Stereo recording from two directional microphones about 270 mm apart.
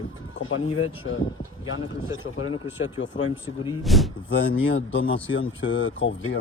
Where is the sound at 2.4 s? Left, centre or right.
Left.